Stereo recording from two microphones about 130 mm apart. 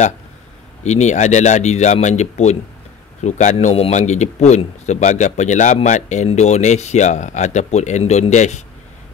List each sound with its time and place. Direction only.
0.8 s speech: 60° left (ahead or behind)